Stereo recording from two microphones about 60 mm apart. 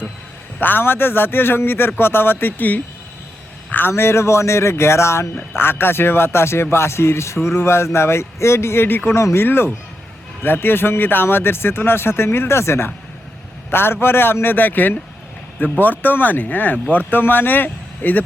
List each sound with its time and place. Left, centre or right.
0.6 s speech: left
9.1 s speech: left